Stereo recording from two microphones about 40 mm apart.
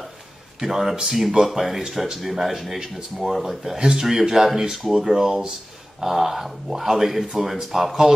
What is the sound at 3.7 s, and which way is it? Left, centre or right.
Speech, right.